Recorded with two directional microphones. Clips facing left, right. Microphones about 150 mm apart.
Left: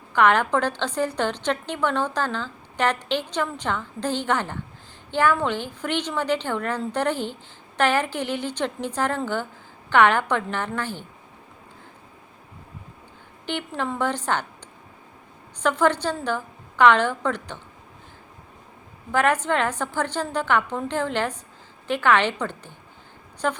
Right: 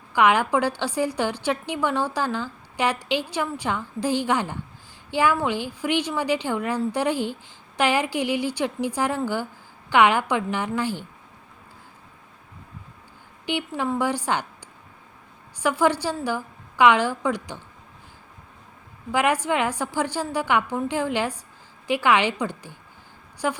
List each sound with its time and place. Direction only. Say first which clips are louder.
0.1 s a woman's voice: even; 10° right (ahead or behind)
13.4 s a woman's voice: right 2 dB; 10° right (ahead or behind)
15.6 s a woman's voice: even; 10° right (ahead or behind)
19.1 s a woman's voice: left 1 dB; 10° right (ahead or behind)